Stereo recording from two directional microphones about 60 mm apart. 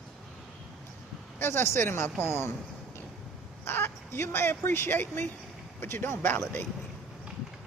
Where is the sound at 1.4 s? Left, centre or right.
Left.